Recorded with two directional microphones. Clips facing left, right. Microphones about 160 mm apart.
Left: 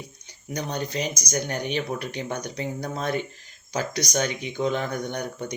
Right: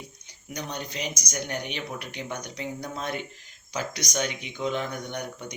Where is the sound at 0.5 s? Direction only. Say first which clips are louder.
Left 6 dB; 35° left (ahead or behind).